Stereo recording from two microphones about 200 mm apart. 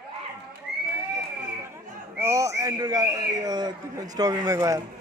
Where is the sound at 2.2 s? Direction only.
15° right (ahead or behind).